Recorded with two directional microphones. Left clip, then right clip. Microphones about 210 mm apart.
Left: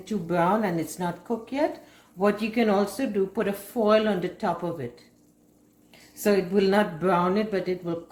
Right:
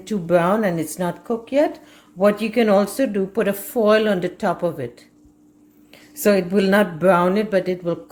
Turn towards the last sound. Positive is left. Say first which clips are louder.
# right 8 dB
turn(degrees=-50)  # may be behind; listen again after turning